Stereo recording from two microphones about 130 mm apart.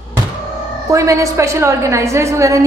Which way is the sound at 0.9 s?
25° right (ahead or behind).